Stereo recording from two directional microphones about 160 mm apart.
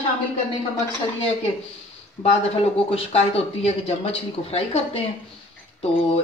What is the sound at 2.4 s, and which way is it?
Speech, 40° left (ahead or behind).